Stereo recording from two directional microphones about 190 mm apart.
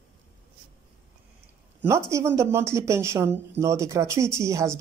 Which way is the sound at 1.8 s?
15° right (ahead or behind).